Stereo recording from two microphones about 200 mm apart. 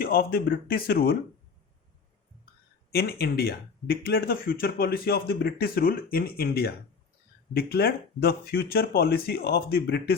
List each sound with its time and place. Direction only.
0.0 s speech: 50° left (ahead or behind)
2.9 s speech: 50° left (ahead or behind)